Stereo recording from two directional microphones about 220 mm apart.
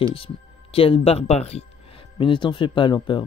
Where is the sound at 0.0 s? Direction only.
25° left (ahead or behind).